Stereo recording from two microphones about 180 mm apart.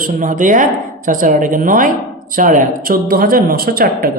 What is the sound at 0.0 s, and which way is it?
A woman's voice, 45° right (ahead or behind).